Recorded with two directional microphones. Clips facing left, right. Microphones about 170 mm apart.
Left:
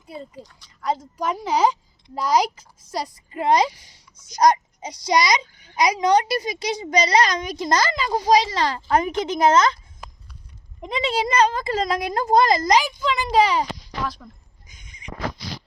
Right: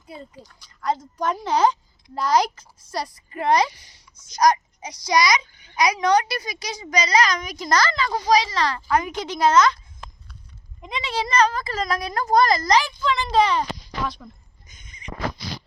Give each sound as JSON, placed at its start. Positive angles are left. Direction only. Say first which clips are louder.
{"t": 0.1, "sound": "a child's voice", "louder": "left 3 dB", "side_deg": 0}
{"t": 11.0, "sound": "a child's voice", "louder": "left 1 dB", "side_deg": 25}
{"t": 14.7, "sound": "a sound", "louder": "right 1 dB", "side_deg": 10}